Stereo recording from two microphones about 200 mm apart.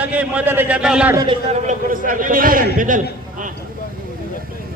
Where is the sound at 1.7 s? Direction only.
40° right (ahead or behind).